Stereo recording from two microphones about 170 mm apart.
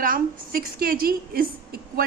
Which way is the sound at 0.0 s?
55° right (ahead or behind).